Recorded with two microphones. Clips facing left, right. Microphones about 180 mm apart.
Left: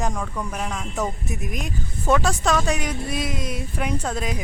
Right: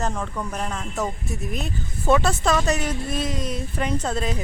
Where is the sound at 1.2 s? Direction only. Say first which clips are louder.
Right 1 dB; 10° left (ahead or behind).